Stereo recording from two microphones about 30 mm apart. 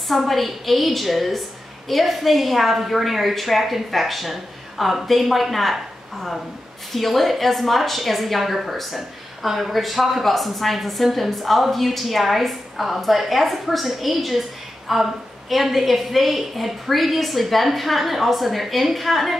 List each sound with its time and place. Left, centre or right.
0.1 s speech: centre